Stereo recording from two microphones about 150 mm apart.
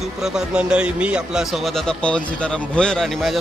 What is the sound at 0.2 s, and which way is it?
A man's voice, 5° right (ahead or behind).